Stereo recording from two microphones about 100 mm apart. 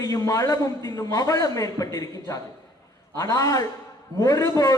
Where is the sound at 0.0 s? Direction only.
35° left (ahead or behind).